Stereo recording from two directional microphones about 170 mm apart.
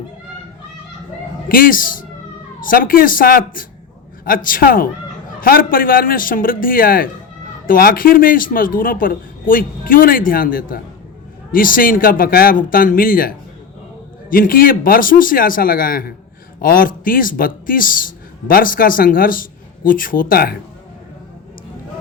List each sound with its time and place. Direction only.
1.5 s a man's voice: 55° left (ahead or behind)